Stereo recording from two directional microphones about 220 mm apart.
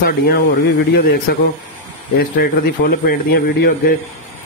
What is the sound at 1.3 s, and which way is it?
Speech, 45° left (ahead or behind).